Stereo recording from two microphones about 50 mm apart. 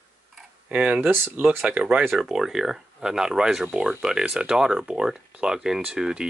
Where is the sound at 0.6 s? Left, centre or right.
Right.